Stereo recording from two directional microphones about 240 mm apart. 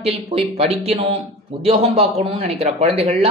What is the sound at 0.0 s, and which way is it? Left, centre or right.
A man's voice, right.